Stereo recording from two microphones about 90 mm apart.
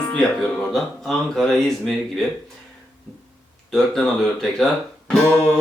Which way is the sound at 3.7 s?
5° left (ahead or behind).